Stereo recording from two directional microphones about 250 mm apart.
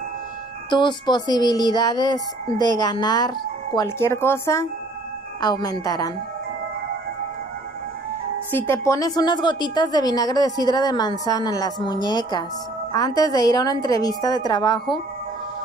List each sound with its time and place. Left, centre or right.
0.7 s music: centre
8.5 s music: centre